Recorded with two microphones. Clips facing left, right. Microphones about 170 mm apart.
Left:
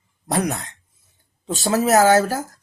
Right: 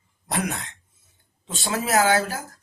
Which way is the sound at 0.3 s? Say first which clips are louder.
Left 5 dB; 40° left (ahead or behind).